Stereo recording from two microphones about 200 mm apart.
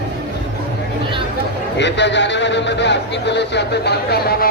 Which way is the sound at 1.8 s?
60° left (ahead or behind).